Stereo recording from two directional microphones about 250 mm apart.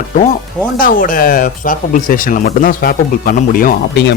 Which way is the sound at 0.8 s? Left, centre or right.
Left.